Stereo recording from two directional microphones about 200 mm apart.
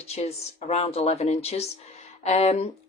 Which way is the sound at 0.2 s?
30° left (ahead or behind).